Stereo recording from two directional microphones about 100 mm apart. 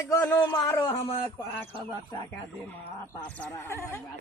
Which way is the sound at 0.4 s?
40° left (ahead or behind).